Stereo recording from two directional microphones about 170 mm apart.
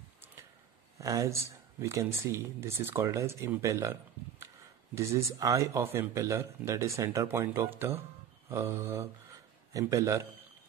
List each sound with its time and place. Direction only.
0.9 s speech: 20° right (ahead or behind)
4.9 s a man's voice: 20° right (ahead or behind)